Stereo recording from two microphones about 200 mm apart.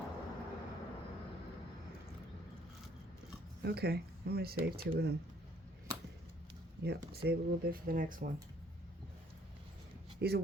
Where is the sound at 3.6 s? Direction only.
50° right (ahead or behind).